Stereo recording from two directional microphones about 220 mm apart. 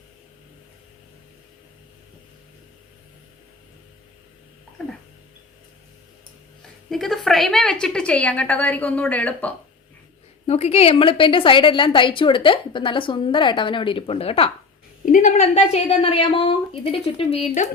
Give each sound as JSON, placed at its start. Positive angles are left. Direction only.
{"t": 6.9, "sound": "a woman's voice", "side_deg": 0}
{"t": 10.4, "sound": "a woman's voice", "side_deg": 30}
{"t": 15.0, "sound": "a woman's voice", "side_deg": 35}